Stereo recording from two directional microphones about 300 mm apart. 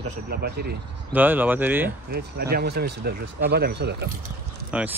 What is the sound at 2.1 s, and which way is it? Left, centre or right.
Speech, right.